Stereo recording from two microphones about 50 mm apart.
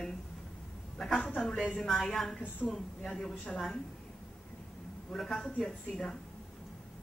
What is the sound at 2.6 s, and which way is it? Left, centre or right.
Speech, left.